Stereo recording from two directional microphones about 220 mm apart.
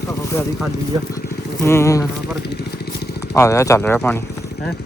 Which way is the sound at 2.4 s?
50° left (ahead or behind).